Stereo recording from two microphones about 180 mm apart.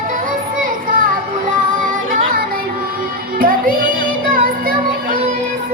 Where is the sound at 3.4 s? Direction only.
50° right (ahead or behind).